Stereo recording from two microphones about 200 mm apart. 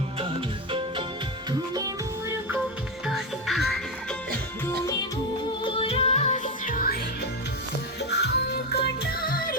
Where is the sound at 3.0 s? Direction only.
Centre (ahead or behind).